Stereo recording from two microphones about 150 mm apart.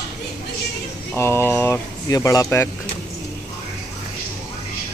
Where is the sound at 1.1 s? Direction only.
15° left (ahead or behind).